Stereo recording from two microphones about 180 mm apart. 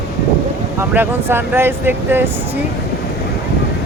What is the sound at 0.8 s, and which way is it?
Speech, 10° right (ahead or behind).